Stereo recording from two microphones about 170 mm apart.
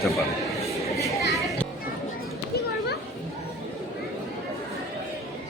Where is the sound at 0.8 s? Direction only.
20° left (ahead or behind).